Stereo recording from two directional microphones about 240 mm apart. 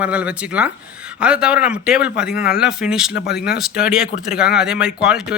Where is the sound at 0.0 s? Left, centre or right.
Centre.